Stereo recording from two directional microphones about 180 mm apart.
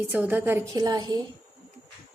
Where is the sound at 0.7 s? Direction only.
20° right (ahead or behind).